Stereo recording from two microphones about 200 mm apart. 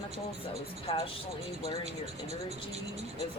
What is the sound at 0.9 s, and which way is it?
Speech, 30° left (ahead or behind).